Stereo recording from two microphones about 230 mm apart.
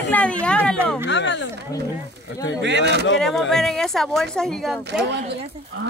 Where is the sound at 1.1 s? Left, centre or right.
Left.